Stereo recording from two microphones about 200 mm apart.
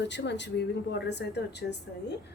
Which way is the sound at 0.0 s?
60° left (ahead or behind).